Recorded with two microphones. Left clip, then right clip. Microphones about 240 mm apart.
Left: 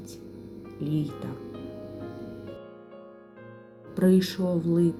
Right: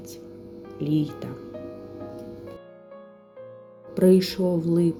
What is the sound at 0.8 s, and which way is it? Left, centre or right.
Speech, right.